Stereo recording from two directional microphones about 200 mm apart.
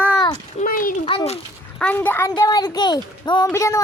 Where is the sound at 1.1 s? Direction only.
25° left (ahead or behind).